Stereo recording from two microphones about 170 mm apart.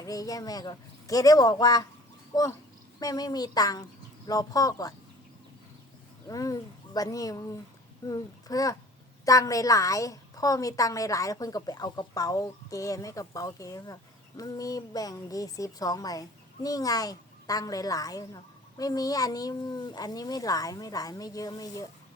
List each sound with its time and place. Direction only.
0.0 s a woman's voice: 20° left (ahead or behind)
6.2 s a woman's voice: 20° left (ahead or behind)